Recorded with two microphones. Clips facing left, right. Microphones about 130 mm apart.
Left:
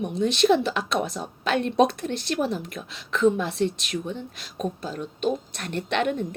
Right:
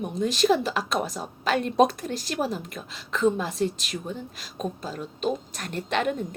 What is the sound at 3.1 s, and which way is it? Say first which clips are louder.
Speech: left 2 dB; 70° left (ahead or behind).